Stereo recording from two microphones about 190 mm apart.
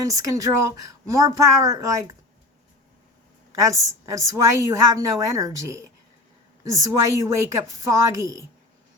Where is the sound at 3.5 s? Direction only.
15° right (ahead or behind).